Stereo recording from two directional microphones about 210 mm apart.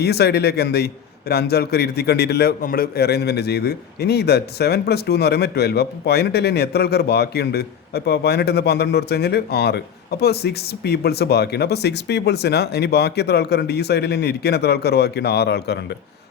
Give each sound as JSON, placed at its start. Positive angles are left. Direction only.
{"t": 0.0, "sound": "a man's voice", "side_deg": 50}